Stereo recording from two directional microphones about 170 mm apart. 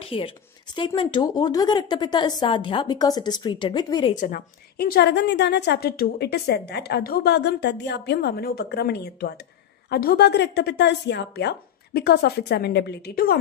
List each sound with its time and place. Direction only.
0.0 s speech: 30° left (ahead or behind)
4.1 s a woman's voice: 50° left (ahead or behind)
4.7 s a woman's voice: 65° left (ahead or behind)